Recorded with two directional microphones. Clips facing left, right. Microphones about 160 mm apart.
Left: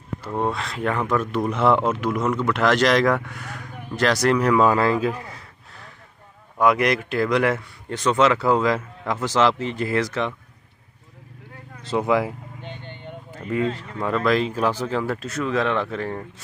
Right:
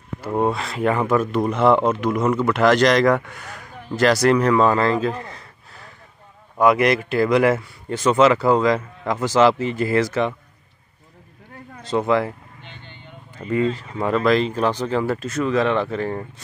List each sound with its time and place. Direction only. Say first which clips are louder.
0.2 s speech: right 4 dB; 10° right (ahead or behind)
11.8 s speech: right 1 dB; 5° left (ahead or behind)
12.6 s vehicle: left 7 dB; 55° left (ahead or behind)
13.7 s speech: right 3 dB; 5° right (ahead or behind)